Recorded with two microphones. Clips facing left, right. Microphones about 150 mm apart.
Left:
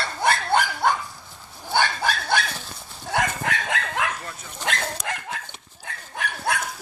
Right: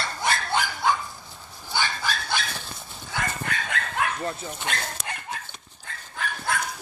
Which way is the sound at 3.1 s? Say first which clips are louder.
Left 6 dB; 90° left.